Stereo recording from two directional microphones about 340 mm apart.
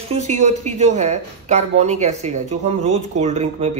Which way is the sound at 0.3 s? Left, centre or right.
Right.